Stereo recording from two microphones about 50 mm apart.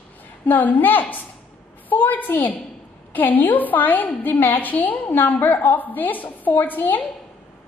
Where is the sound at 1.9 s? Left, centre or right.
Left.